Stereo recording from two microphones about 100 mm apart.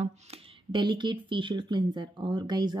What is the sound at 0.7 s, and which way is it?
Speech, 50° right (ahead or behind).